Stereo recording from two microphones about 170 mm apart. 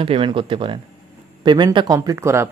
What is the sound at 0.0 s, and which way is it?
Speech, 30° right (ahead or behind).